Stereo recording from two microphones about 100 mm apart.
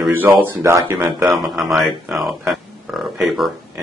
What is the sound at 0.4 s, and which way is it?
Speech, 25° right (ahead or behind).